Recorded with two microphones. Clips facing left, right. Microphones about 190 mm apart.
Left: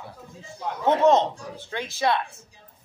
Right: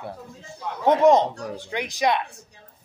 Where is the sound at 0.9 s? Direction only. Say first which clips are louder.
Right 2 dB; 15° right (ahead or behind).